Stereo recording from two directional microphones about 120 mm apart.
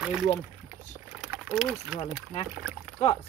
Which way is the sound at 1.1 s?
5° right (ahead or behind).